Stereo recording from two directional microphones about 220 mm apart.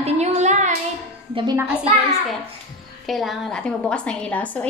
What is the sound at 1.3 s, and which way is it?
Speech, 20° right (ahead or behind).